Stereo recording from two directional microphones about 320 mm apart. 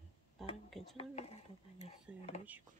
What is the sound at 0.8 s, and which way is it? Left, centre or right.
Speech, centre.